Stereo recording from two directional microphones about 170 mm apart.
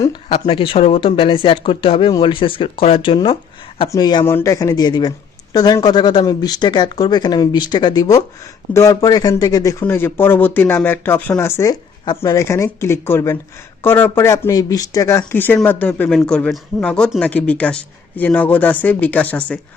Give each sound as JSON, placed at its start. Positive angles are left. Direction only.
{"t": 0.0, "sound": "speech", "side_deg": 25}